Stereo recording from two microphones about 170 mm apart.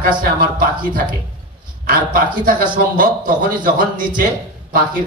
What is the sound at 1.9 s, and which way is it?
A man's voice, 55° right (ahead or behind).